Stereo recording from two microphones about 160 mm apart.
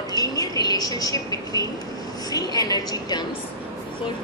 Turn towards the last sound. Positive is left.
turn(degrees=25)  # may be behind; listen again after turning